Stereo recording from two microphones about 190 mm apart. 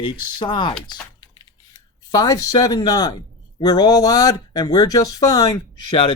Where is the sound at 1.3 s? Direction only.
20° left (ahead or behind).